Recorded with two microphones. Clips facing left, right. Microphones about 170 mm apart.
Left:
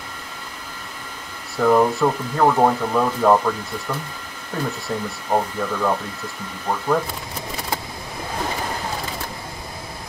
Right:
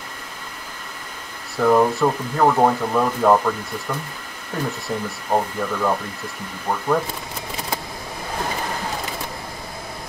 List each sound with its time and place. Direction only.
1.6 s speech: centre (ahead or behind)